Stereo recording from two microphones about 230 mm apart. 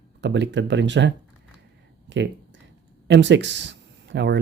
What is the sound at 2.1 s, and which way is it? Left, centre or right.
Speech, right.